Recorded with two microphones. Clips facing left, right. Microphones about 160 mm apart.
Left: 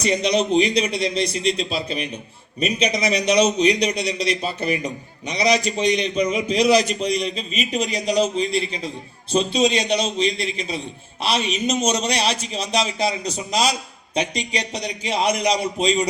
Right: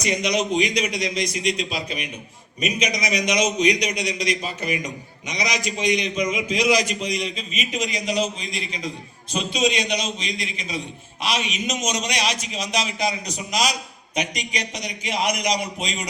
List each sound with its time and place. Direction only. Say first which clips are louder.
0.0 s a man's voice: left 3 dB; 30° left (ahead or behind)